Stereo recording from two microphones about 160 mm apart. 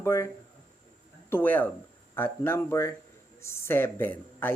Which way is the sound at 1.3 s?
10° left (ahead or behind).